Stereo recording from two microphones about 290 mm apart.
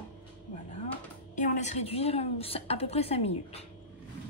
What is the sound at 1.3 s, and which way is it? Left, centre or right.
A woman's voice, left.